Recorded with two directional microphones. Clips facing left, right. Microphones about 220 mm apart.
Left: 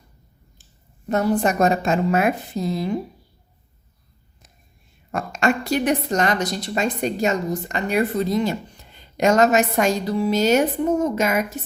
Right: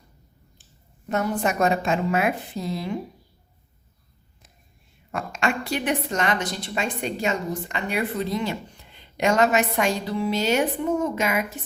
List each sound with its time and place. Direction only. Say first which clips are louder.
1.0 s a woman's voice: left 5 dB; 35° left (ahead or behind)
5.1 s a woman's voice: left 5 dB; 40° left (ahead or behind)